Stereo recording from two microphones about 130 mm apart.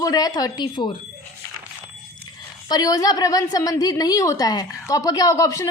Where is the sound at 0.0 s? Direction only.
30° left (ahead or behind).